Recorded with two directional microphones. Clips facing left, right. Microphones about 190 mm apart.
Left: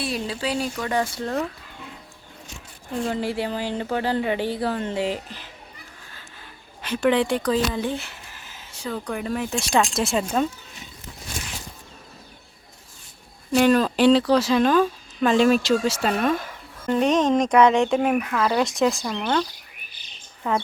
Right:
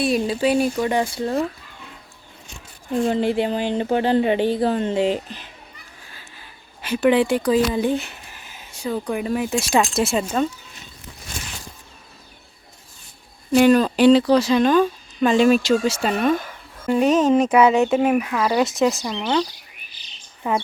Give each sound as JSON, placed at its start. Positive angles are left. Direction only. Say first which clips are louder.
{"t": 0.0, "sound": "speech", "louder": "right 8 dB", "side_deg": -15}
{"t": 3.1, "sound": "speech", "louder": "right 5 dB", "side_deg": -20}
{"t": 6.8, "sound": "speech", "louder": "right 3 dB", "side_deg": -5}
{"t": 13.5, "sound": "speech", "louder": "right 3 dB", "side_deg": 0}
{"t": 20.0, "sound": "chirp", "louder": "even", "side_deg": 55}
{"t": 20.4, "sound": "speech", "louder": "right 2 dB", "side_deg": -10}